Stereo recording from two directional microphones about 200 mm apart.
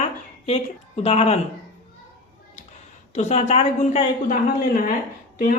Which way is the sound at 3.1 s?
35° left (ahead or behind).